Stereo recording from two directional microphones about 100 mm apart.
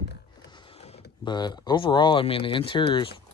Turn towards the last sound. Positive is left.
turn(degrees=55)  # may be behind; listen again after turning